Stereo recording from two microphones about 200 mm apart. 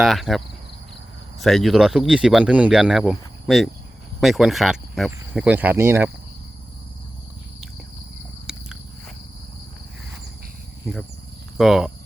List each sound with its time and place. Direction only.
0.0 s speech: centre (ahead or behind)
8.5 s a sound: 5° right (ahead or behind)
11.5 s speech: centre (ahead or behind)